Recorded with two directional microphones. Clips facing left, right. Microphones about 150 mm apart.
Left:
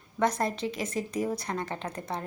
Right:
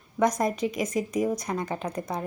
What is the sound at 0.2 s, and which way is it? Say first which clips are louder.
A woman's voice: right 4 dB; 15° right (ahead or behind).